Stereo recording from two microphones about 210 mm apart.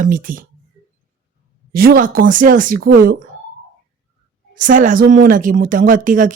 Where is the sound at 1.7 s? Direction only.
45° right (ahead or behind).